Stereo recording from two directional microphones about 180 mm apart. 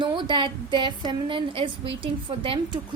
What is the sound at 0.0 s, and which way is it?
A woman's voice, 25° right (ahead or behind).